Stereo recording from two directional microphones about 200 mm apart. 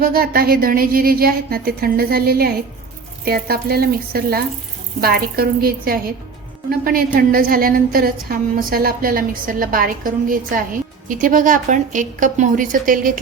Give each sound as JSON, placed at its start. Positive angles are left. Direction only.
{"t": 0.0, "sound": "a woman's voice", "side_deg": -50}